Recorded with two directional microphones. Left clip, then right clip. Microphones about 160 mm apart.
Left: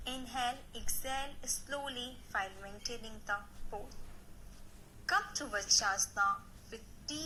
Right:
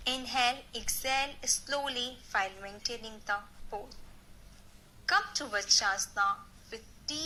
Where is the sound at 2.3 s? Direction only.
40° right (ahead or behind).